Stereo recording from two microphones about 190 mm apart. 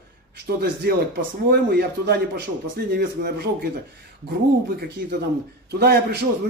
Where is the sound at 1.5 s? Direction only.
55° right (ahead or behind).